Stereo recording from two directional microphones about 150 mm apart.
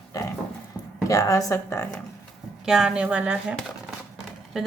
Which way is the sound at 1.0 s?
20° left (ahead or behind).